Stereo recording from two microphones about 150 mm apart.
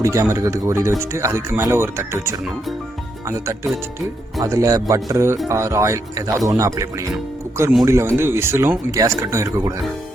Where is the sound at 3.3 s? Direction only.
20° right (ahead or behind).